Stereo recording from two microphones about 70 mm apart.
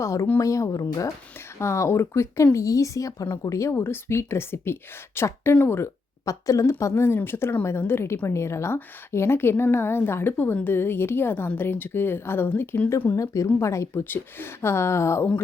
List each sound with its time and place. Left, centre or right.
0.0 s speech: left
1.5 s a woman's voice: left
6.2 s a woman's voice: left
13.1 s speech: left
14.0 s a woman's voice: left